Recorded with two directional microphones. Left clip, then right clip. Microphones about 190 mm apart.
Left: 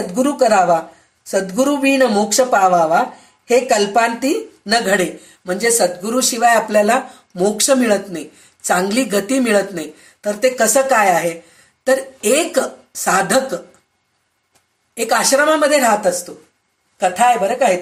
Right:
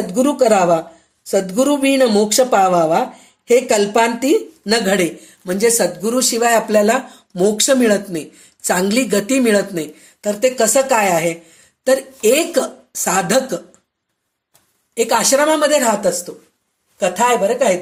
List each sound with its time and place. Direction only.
0.1 s speech: 30° right (ahead or behind)
14.9 s speech: 30° right (ahead or behind)